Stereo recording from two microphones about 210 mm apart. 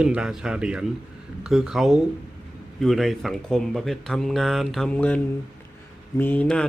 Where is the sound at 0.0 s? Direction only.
5° right (ahead or behind).